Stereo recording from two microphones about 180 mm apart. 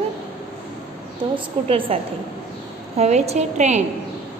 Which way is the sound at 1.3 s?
30° right (ahead or behind).